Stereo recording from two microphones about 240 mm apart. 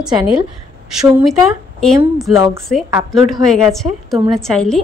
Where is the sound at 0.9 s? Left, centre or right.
Centre.